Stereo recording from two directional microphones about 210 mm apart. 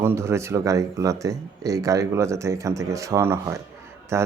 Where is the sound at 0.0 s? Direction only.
10° right (ahead or behind).